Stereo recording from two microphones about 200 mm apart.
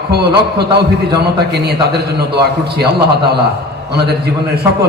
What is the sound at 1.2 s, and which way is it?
A man's voice, 55° right (ahead or behind).